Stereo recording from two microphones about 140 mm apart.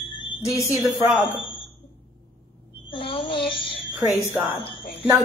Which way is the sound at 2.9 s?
40° left (ahead or behind).